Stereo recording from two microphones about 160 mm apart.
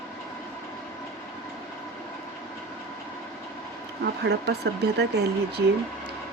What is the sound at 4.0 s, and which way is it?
Speech, 90° right.